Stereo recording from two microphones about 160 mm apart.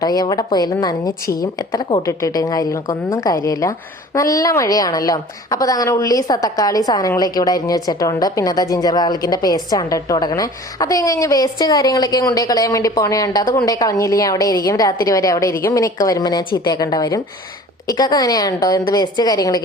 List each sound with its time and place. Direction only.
0.0 s a woman's voice: 25° left (ahead or behind)